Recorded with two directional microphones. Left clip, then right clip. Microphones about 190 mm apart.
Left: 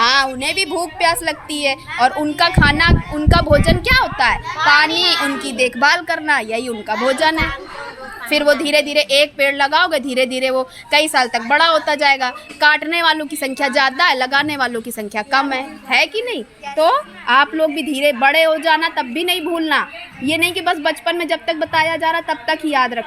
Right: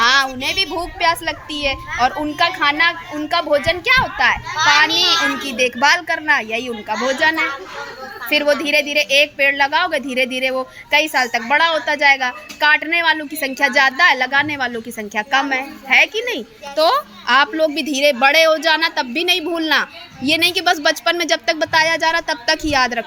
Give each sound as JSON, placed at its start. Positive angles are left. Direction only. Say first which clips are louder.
{"t": 0.0, "sound": "a sound", "louder": "even", "side_deg": 20}
{"t": 0.3, "sound": "a woman's voice", "louder": "left 1 dB", "side_deg": 20}
{"t": 5.4, "sound": "a woman's voice", "louder": "left 1 dB", "side_deg": 15}